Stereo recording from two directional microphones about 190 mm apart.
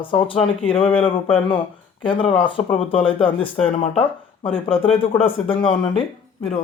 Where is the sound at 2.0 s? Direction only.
25° left (ahead or behind).